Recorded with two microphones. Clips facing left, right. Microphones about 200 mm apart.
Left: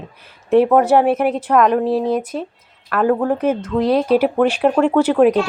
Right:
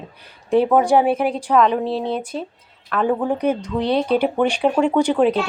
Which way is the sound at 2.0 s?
30° right (ahead or behind).